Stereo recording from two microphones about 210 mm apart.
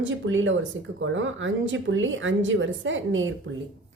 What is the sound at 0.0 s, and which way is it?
Speech, 65° right (ahead or behind).